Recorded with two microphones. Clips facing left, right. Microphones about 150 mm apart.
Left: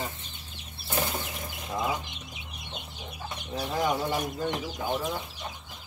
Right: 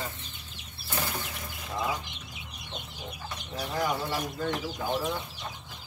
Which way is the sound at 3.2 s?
20° left (ahead or behind).